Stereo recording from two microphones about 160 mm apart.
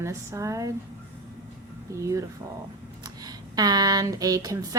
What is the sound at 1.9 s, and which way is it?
A woman's voice, 20° right (ahead or behind).